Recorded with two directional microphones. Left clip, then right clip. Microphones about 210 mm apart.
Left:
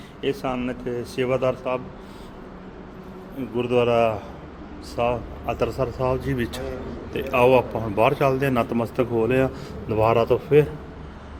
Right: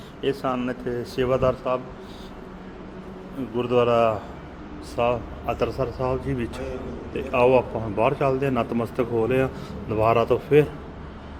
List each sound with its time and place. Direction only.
0.2 s speech: centre (ahead or behind)
3.5 s a man's voice: centre (ahead or behind)